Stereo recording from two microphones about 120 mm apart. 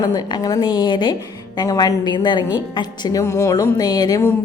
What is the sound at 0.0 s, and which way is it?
A woman's voice, 35° left (ahead or behind).